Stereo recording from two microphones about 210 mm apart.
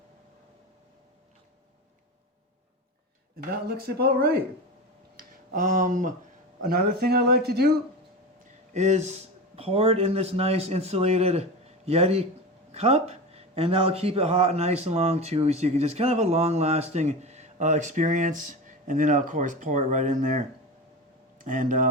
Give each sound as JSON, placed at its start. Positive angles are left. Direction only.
{"t": 3.7, "sound": "speech", "side_deg": -50}
{"t": 5.5, "sound": "a man's voice", "side_deg": -35}
{"t": 8.7, "sound": "a man's voice", "side_deg": -30}